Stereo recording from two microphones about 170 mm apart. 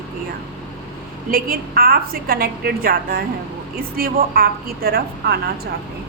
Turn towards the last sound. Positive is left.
turn(degrees=-65)  # may be behind; listen again after turning